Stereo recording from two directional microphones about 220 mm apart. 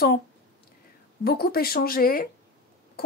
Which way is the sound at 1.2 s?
45° left (ahead or behind).